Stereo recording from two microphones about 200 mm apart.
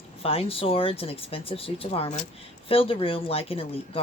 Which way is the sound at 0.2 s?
30° left (ahead or behind).